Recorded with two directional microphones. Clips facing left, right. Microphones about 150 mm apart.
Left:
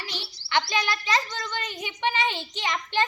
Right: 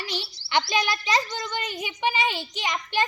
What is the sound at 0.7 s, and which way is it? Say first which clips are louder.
A child's voice: right 2 dB; 15° right (ahead or behind).